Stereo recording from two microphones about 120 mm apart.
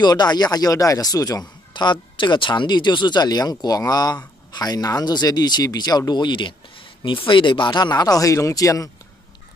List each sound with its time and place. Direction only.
0.0 s speech: 35° left (ahead or behind)